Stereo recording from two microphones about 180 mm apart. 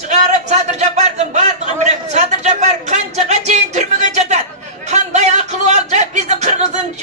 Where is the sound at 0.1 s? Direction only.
40° right (ahead or behind).